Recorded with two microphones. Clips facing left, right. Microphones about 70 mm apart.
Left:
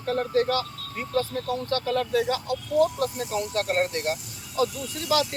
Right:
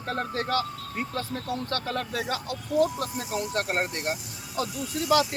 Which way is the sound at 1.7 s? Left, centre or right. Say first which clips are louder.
Left 5 dB; right.